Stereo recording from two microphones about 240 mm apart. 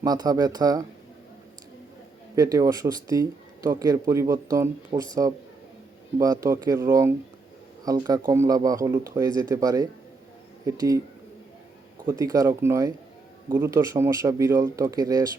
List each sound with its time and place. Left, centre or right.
0.0 s speech: centre
2.3 s speech: centre
6.1 s speech: centre
12.0 s speech: centre